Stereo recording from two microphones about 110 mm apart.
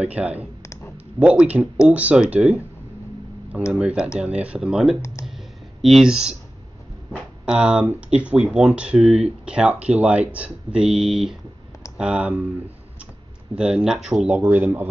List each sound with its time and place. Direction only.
0.0 s speech: 10° right (ahead or behind)
0.6 s clicking: 25° left (ahead or behind)
1.2 s speech: 10° right (ahead or behind)
3.7 s speech: 10° right (ahead or behind)
13.6 s speech: 10° right (ahead or behind)
14.4 s speech: 20° right (ahead or behind)